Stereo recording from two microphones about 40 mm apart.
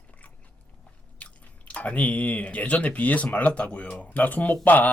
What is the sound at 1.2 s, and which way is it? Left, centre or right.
Speech, left.